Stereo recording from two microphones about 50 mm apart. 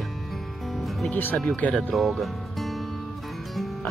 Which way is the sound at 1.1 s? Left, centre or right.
Left.